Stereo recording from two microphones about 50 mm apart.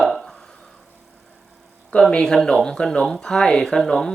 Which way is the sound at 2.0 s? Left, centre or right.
Centre.